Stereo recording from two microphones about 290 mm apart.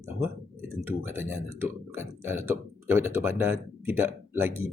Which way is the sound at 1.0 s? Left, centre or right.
Centre.